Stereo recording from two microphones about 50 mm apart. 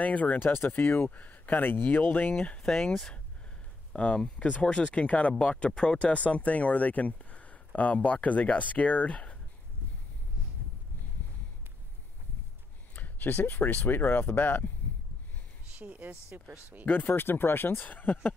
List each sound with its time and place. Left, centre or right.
0.0 s speech: left
0.8 s speech: left
1.1 s speech: left
2.4 s speech: left
2.7 s speech: centre
3.9 s speech: left
12.9 s speech: left
15.8 s speech: right
16.8 s speech: left